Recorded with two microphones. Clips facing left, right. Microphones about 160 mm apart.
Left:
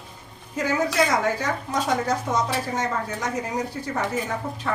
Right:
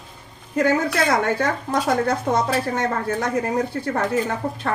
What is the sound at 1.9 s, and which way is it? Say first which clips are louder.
Speech: right 3 dB; 55° right (ahead or behind).